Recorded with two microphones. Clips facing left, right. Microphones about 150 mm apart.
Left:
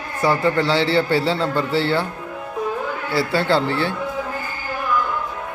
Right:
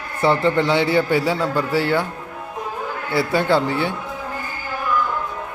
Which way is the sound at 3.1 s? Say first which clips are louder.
Right 1 dB; 20° right (ahead or behind).